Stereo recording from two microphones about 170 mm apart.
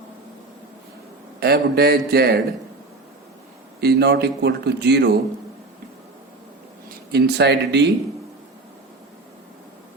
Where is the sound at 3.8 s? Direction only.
70° right (ahead or behind).